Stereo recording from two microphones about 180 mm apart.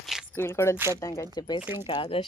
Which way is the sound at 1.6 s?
10° right (ahead or behind).